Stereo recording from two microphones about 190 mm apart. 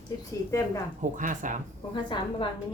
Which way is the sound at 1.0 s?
40° right (ahead or behind).